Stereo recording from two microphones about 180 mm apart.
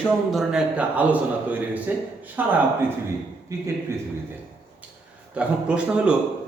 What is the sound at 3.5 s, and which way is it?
Speech, 15° right (ahead or behind).